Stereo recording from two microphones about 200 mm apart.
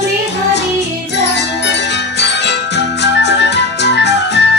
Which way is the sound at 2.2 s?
60° left (ahead or behind).